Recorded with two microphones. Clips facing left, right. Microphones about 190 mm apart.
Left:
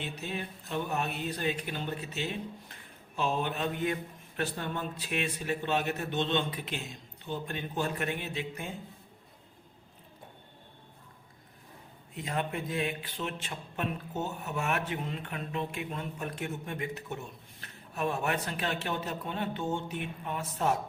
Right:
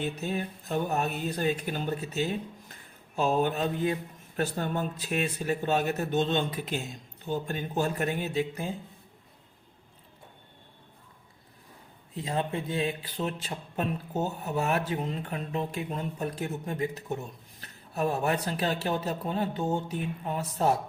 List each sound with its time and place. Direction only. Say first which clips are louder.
0.0 s a man's voice: right 6 dB; 45° right (ahead or behind)
12.1 s a man's voice: right 3 dB; 30° right (ahead or behind)